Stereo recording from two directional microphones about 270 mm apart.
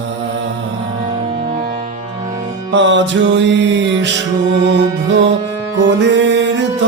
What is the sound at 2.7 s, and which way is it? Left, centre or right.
Music, right.